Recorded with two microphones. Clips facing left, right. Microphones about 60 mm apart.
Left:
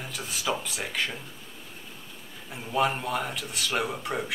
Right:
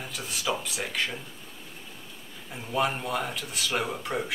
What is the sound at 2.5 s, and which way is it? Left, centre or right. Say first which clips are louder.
Speech: left 1 dB; centre.